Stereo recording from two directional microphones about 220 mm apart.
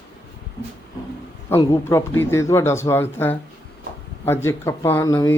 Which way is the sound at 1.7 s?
10° left (ahead or behind).